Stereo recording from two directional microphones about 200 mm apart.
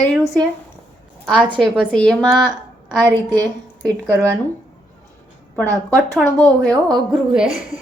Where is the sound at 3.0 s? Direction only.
20° right (ahead or behind).